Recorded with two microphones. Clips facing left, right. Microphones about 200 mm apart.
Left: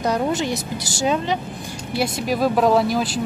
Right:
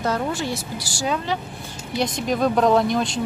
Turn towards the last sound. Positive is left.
turn(degrees=5)  # may be behind; listen again after turning